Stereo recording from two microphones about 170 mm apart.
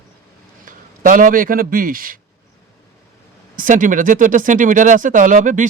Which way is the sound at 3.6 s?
50° right (ahead or behind).